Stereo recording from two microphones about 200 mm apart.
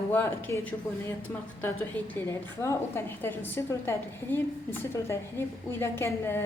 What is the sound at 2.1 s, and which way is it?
Speech, 15° left (ahead or behind).